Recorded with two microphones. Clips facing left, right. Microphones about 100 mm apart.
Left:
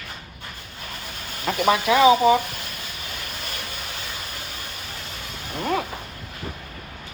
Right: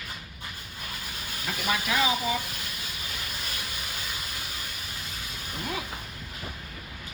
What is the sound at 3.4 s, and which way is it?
Vehicle, 50° left (ahead or behind).